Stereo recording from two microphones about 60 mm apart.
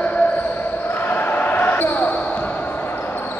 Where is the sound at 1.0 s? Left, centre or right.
Left.